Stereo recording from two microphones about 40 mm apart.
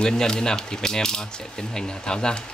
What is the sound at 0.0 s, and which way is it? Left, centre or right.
Speech, centre.